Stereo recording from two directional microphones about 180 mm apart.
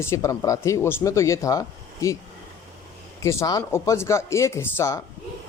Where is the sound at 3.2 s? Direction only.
15° left (ahead or behind).